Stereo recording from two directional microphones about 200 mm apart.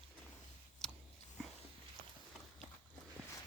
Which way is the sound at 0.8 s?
5° left (ahead or behind).